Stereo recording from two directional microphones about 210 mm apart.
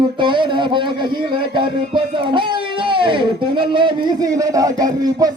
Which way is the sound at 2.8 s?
25° right (ahead or behind).